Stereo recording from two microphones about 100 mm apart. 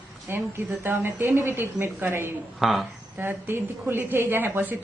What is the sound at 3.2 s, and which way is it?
A woman's voice, 20° right (ahead or behind).